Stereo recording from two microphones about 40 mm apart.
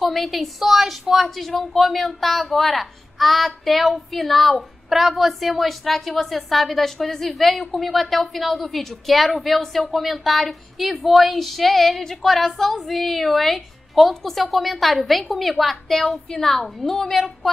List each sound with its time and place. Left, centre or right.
0.0 s a woman's voice: centre